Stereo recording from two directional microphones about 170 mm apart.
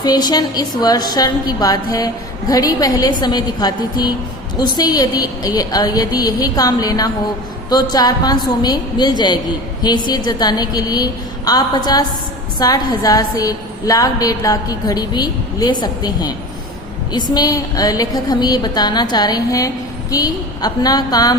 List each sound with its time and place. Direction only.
0.0 s a woman's voice: 25° left (ahead or behind)
17.3 s a woman's voice: 20° left (ahead or behind)